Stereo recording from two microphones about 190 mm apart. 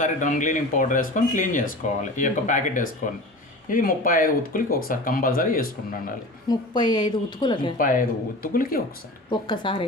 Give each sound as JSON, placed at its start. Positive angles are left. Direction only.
{"t": 0.0, "sound": "speech", "side_deg": 40}
{"t": 6.5, "sound": "a woman's voice", "side_deg": 25}
{"t": 7.8, "sound": "speech", "side_deg": 45}
{"t": 9.5, "sound": "a woman's voice", "side_deg": 25}